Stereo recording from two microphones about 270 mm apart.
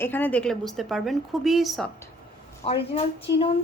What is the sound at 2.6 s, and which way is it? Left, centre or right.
Speech, left.